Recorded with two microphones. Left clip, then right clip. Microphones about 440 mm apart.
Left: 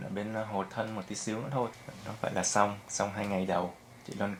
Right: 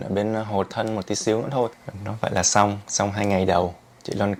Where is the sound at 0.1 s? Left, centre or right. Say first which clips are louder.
Right 11 dB; right.